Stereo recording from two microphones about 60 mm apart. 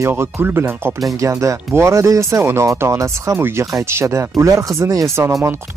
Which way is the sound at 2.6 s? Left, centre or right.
Right.